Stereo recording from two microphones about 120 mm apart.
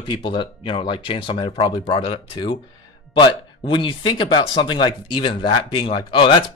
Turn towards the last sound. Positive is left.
turn(degrees=45)  # may be behind; listen again after turning